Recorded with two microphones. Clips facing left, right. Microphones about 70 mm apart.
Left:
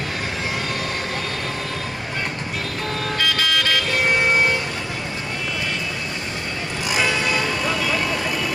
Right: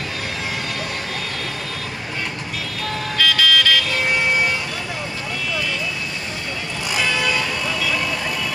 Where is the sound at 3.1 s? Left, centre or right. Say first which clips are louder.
Right 5 dB; left.